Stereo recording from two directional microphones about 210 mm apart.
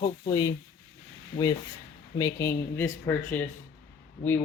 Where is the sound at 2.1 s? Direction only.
15° left (ahead or behind).